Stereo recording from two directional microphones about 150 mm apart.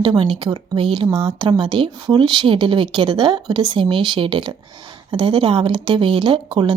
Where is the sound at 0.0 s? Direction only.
35° right (ahead or behind).